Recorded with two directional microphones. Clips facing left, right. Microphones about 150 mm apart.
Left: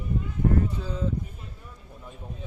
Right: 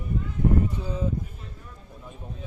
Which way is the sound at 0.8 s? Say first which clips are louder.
Right 1 dB; 15° right (ahead or behind).